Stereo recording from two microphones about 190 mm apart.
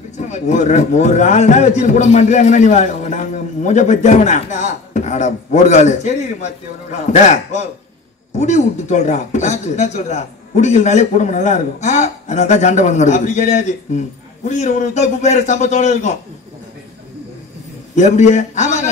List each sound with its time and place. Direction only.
0.3 s a man's voice: 40° left (ahead or behind)
17.9 s a man's voice: 40° left (ahead or behind)